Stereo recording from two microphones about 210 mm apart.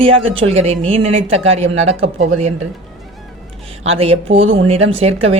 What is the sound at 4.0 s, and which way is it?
Speech, 30° right (ahead or behind).